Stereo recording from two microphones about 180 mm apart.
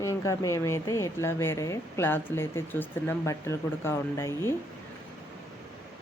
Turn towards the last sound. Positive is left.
turn(degrees=15)  # may be behind; listen again after turning